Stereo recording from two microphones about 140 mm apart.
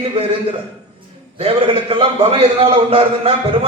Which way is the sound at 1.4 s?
40° right (ahead or behind).